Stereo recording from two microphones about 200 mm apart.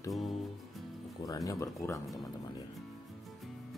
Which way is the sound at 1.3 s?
15° left (ahead or behind).